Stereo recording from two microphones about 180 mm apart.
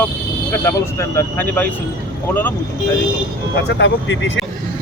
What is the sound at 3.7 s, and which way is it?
Speech, 80° left.